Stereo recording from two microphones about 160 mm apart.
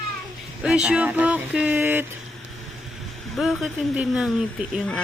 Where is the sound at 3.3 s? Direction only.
Centre (ahead or behind).